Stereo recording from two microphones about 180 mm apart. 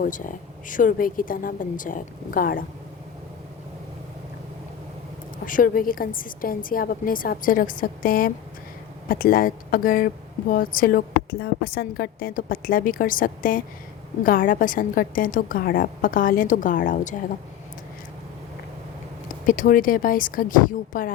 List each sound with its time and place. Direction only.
0.0 s a woman's voice: 50° left (ahead or behind)
5.5 s a woman's voice: 50° left (ahead or behind)
19.5 s a woman's voice: 50° left (ahead or behind)